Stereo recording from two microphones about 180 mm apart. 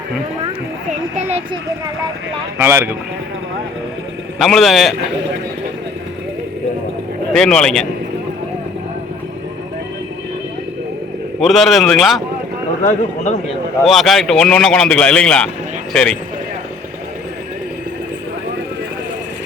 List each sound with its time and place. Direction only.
2.6 s speech: 15° right (ahead or behind)
4.4 s a man's voice: centre (ahead or behind)
7.3 s a man's voice: 5° left (ahead or behind)
11.3 s a man's voice: centre (ahead or behind)
12.8 s speech: 45° left (ahead or behind)
13.8 s a man's voice: centre (ahead or behind)